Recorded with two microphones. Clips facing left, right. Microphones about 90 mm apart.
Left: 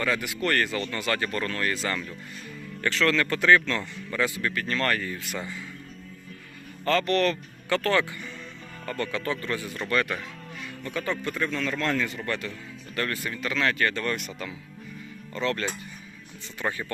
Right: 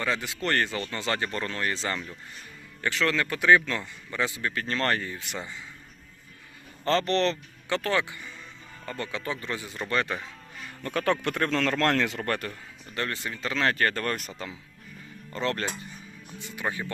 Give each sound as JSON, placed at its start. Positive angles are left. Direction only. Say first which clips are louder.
{"t": 0.0, "sound": "a man's voice", "louder": "left 2 dB", "side_deg": -25}
{"t": 6.8, "sound": "a man's voice", "louder": "left 1 dB", "side_deg": -30}
{"t": 10.8, "sound": "speech", "louder": "right 4 dB", "side_deg": -60}
{"t": 13.0, "sound": "speech", "louder": "left 2 dB", "side_deg": -25}
{"t": 16.4, "sound": "speech", "louder": "left 1 dB", "side_deg": -15}